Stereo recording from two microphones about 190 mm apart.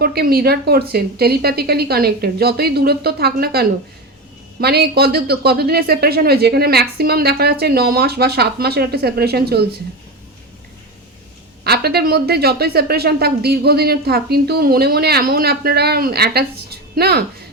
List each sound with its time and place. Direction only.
0.0 s speech: 55° right (ahead or behind)
11.6 s speech: 55° right (ahead or behind)